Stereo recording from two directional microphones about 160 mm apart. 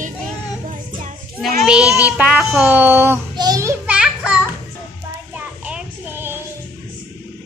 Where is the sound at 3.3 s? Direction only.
25° right (ahead or behind).